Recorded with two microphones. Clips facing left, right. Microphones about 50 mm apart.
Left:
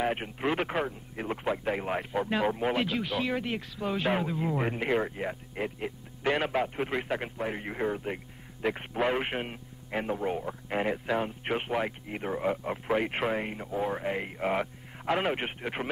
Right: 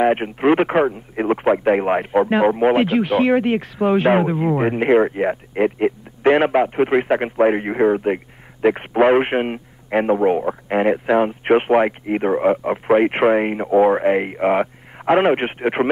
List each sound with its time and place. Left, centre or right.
0.0 s a man's voice: right